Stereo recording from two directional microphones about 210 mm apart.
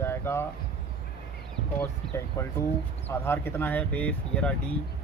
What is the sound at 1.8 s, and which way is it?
Speech, 15° left (ahead or behind).